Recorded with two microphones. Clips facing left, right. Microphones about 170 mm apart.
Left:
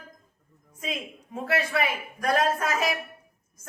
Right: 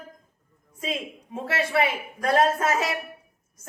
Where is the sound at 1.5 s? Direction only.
25° right (ahead or behind).